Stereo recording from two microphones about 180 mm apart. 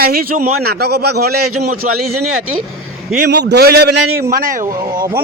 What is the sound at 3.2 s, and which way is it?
A man's voice, 65° right (ahead or behind).